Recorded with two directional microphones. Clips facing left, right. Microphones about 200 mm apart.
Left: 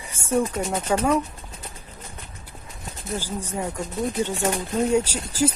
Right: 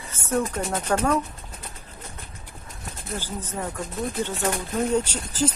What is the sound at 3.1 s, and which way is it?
Speech, 10° left (ahead or behind).